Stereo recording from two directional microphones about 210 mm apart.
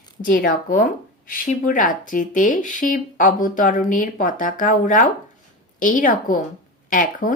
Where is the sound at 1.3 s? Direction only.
40° left (ahead or behind).